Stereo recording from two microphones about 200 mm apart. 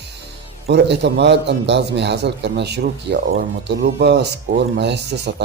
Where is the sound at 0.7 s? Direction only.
60° right (ahead or behind).